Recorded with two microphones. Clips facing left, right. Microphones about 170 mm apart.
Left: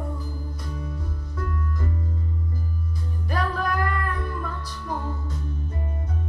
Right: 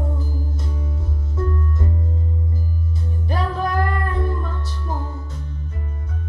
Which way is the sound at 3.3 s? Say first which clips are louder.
Right 3 dB; 25° right (ahead or behind).